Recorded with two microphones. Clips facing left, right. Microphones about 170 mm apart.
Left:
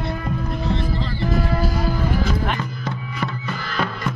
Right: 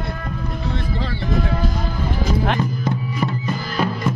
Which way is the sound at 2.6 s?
20° right (ahead or behind).